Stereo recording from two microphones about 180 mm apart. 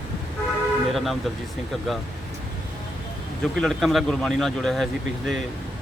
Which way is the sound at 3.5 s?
Centre (ahead or behind).